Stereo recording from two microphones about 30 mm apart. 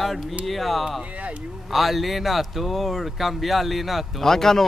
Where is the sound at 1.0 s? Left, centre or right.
Right.